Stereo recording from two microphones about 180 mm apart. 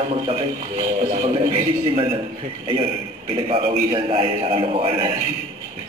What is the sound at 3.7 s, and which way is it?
A man's voice, 40° right (ahead or behind).